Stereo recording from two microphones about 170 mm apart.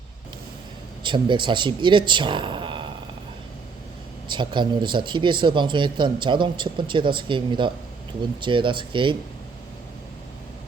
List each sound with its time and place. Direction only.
1.0 s a man's voice: 30° right (ahead or behind)
4.3 s a man's voice: 25° right (ahead or behind)